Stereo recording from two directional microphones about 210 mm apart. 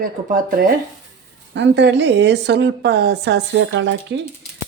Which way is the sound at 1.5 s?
55° right (ahead or behind).